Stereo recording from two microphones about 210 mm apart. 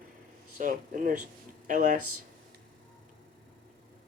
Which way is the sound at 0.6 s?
40° right (ahead or behind).